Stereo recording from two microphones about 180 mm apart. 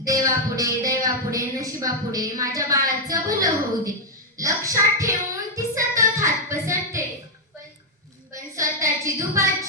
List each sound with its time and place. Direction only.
0.0 s a woman's voice: 20° right (ahead or behind)
4.4 s child singing: 15° right (ahead or behind)
8.3 s a sound: 15° right (ahead or behind)